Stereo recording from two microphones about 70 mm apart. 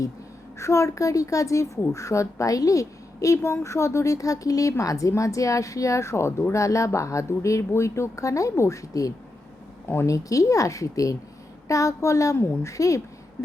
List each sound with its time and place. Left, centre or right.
0.6 s a woman's voice: left